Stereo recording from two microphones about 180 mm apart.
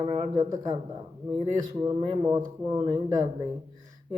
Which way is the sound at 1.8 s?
25° right (ahead or behind).